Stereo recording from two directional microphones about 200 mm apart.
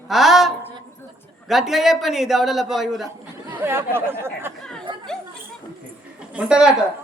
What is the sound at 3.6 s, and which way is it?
Speech, 10° right (ahead or behind).